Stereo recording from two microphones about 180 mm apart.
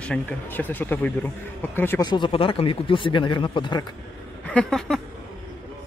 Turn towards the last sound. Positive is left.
turn(degrees=0)  # may be behind; listen again after turning